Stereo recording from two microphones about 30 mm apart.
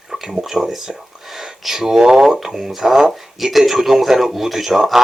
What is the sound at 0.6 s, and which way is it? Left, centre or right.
Speech, centre.